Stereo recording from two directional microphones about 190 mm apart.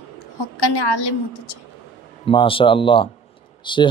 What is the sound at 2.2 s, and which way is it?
Speech, 25° left (ahead or behind).